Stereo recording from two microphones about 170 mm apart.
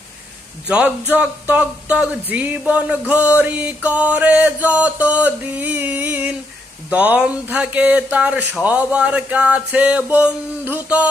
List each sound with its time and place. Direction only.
0.7 s speech: 5° right (ahead or behind)